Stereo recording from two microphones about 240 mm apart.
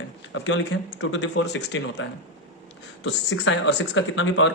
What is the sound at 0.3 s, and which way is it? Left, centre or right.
Speech, left.